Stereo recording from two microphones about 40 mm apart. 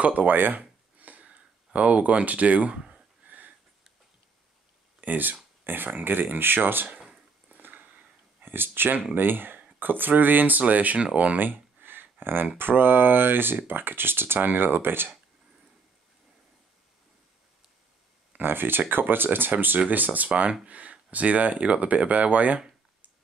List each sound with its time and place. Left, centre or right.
0.0 s speech: right
0.6 s a sound: right
1.2 s speech: right
3.3 s sniff: right
5.0 s a sound: right
5.9 s speech: right
7.5 s a sound: right
8.4 s speech: right
11.3 s a sound: right
12.5 s speech: right
18.4 s speech: right
20.3 s speech: centre
20.6 s speech: right